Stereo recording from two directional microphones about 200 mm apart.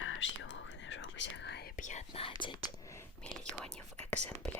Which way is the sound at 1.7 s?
40° left (ahead or behind).